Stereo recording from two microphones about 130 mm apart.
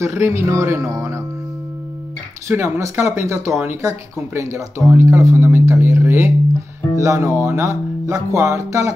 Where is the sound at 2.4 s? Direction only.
20° right (ahead or behind).